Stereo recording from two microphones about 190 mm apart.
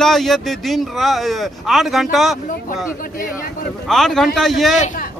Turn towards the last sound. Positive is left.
turn(degrees=45)  # may be behind; listen again after turning